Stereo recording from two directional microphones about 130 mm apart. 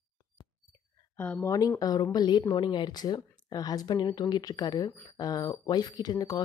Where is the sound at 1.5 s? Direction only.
25° left (ahead or behind).